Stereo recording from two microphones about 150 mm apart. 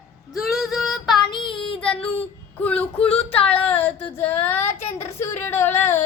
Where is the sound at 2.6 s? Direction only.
10° left (ahead or behind).